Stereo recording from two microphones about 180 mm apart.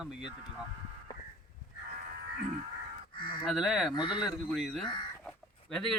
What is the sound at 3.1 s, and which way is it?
Honk, 25° left (ahead or behind).